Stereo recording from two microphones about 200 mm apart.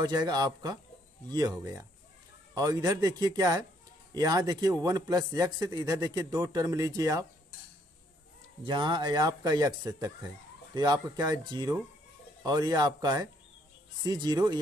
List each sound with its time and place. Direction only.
0.0 s a man's voice: 20° right (ahead or behind)
8.6 s speech: 25° right (ahead or behind)